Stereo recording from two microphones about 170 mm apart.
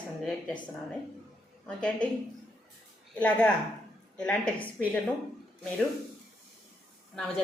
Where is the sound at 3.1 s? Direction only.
5° left (ahead or behind).